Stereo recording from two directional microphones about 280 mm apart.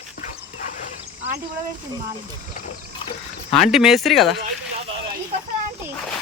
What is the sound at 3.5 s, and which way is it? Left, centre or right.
Speech, centre.